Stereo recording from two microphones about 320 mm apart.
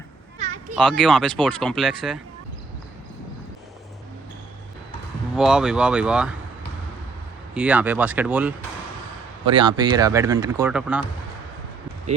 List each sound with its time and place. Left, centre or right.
0.3 s children playing: right
0.8 s speech: centre
5.3 s speech: centre
7.5 s speech: centre
9.6 s speech: centre